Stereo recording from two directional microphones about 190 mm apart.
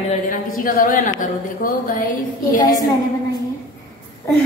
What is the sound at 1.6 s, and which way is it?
Music, 45° left (ahead or behind).